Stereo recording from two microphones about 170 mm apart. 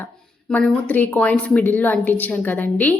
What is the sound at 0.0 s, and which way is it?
Speech, 5° left (ahead or behind).